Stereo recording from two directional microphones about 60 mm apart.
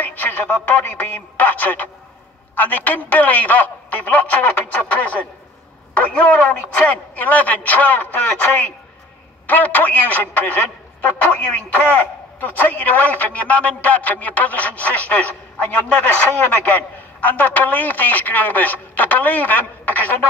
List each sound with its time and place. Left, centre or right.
0.0 s a man's voice: left
9.5 s a man's voice: left